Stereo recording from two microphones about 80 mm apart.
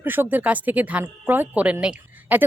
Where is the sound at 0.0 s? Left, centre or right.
Right.